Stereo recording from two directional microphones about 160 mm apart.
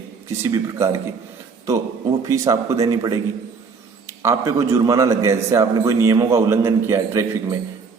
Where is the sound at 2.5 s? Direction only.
20° right (ahead or behind).